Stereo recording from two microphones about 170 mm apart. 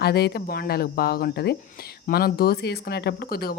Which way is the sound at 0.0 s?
70° left (ahead or behind).